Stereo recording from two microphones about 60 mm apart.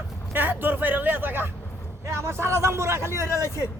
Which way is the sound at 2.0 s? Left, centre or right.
Right.